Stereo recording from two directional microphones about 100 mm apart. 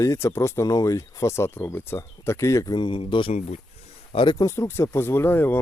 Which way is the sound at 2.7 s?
55° left (ahead or behind).